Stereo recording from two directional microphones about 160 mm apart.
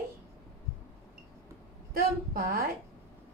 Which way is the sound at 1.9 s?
70° right (ahead or behind).